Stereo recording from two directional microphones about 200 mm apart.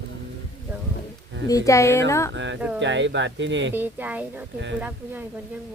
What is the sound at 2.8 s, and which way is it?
Speech, 65° right (ahead or behind).